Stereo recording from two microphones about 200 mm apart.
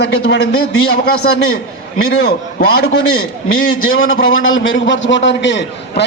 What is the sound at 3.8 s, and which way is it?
A man's voice, 80° left.